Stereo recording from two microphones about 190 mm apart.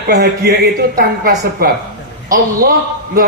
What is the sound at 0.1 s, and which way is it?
A man's voice, 60° right (ahead or behind).